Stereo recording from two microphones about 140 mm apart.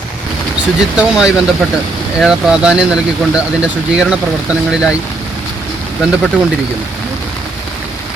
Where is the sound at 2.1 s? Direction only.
5° right (ahead or behind).